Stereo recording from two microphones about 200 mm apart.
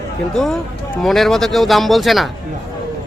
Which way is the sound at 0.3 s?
Centre (ahead or behind).